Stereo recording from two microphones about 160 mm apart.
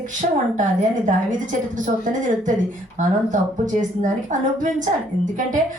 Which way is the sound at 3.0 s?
50° right (ahead or behind).